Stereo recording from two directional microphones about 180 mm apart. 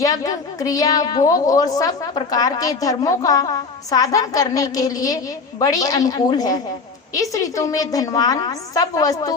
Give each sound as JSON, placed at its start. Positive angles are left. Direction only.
{"t": 0.0, "sound": "a woman's voice", "side_deg": 20}